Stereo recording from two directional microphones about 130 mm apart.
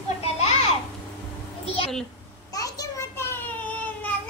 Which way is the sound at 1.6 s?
50° left (ahead or behind).